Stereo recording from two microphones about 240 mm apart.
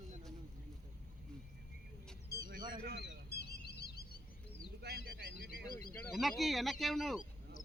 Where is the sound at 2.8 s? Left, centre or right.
Right.